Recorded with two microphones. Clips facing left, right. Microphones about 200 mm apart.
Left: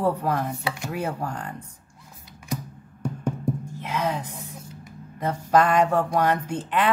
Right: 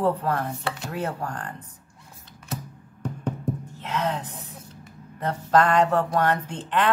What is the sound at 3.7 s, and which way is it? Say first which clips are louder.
Speech: right 2 dB; 10° left (ahead or behind).